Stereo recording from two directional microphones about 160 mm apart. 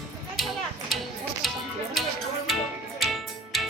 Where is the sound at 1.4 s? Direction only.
Centre (ahead or behind).